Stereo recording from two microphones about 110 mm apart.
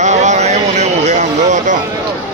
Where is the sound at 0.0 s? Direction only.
90° right.